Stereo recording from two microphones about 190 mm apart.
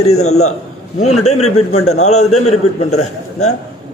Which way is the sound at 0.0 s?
35° left (ahead or behind).